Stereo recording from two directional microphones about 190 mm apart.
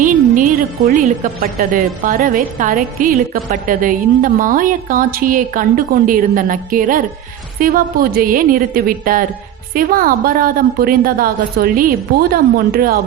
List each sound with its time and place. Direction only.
0.9 s a woman's voice: 40° right (ahead or behind)